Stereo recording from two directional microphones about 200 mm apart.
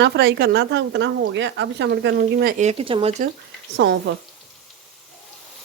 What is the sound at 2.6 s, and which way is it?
Speech, 30° right (ahead or behind).